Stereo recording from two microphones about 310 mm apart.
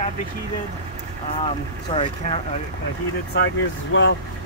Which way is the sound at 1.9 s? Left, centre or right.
Centre.